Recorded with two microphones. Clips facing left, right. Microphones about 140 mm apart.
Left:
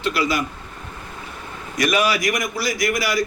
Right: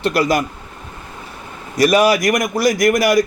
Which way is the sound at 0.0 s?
45° right (ahead or behind).